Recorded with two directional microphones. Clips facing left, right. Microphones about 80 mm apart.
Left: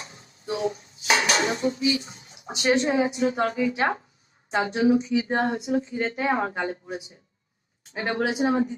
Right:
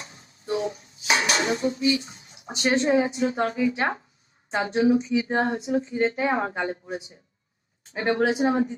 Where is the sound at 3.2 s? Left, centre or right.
Left.